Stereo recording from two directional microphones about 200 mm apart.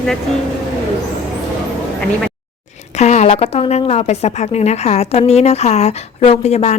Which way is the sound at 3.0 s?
35° left (ahead or behind).